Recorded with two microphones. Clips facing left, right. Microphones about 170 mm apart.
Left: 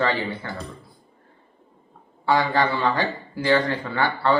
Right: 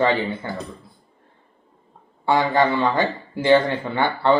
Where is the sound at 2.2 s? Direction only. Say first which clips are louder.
Right 2 dB; 20° right (ahead or behind).